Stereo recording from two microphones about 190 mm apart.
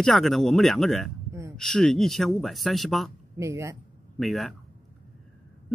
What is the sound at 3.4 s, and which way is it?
Speech, 15° right (ahead or behind).